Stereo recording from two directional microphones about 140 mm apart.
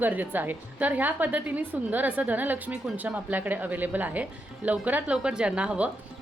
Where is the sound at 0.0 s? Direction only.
15° right (ahead or behind).